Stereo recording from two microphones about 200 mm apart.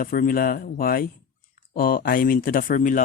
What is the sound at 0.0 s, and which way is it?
Speech, 45° left (ahead or behind).